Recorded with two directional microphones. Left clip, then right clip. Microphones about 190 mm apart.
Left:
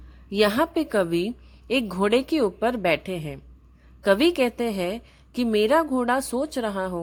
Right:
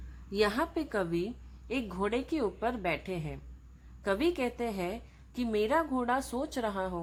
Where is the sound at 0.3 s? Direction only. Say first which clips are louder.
Left 8 dB; 30° left (ahead or behind).